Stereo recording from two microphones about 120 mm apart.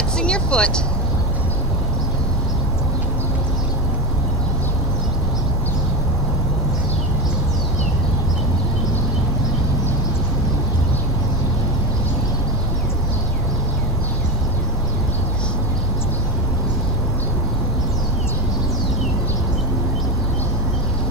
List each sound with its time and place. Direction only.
0.2 s vehicle: 10° left (ahead or behind)